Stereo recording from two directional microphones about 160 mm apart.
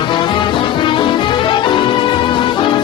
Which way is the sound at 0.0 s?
30° left (ahead or behind).